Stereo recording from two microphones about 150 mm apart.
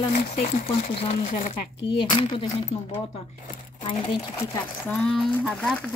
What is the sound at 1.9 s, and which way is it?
Speech, 35° left (ahead or behind).